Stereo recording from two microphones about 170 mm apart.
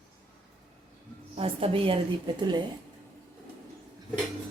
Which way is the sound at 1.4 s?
35° right (ahead or behind).